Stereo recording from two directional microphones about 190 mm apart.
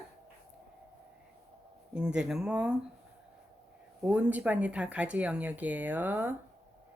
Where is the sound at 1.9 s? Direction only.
5° right (ahead or behind).